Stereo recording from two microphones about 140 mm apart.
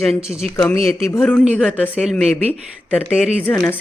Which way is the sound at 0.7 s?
45° right (ahead or behind).